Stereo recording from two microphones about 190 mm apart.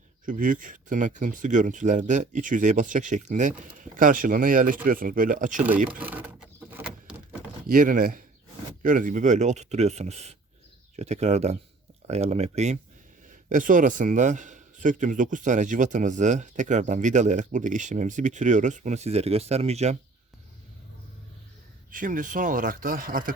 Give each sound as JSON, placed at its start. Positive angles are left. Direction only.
{"t": 0.3, "sound": "speech", "side_deg": -45}
{"t": 5.9, "sound": "a sound", "side_deg": -10}
{"t": 7.7, "sound": "a man's voice", "side_deg": -45}
{"t": 21.8, "sound": "speech", "side_deg": -45}